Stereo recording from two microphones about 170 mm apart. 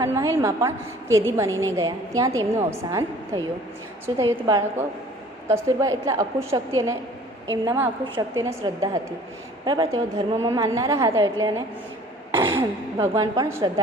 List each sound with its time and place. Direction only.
0.0 s a woman's voice: 15° right (ahead or behind)